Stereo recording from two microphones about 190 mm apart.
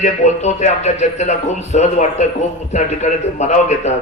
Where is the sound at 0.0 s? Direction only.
35° left (ahead or behind).